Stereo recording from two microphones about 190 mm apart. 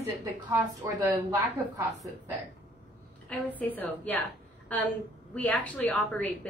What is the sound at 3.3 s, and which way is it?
Speech, 10° left (ahead or behind).